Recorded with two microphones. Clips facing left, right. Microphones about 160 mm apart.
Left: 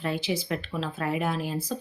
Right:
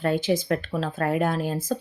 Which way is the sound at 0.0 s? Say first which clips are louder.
Right 6 dB; 45° right (ahead or behind).